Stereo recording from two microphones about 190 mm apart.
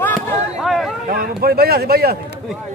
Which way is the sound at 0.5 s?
Centre (ahead or behind).